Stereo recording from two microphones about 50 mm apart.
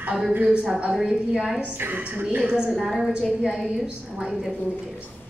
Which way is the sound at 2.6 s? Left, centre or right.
Centre.